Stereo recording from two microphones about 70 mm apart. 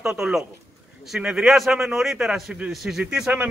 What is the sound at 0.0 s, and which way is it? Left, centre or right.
A man's voice, centre.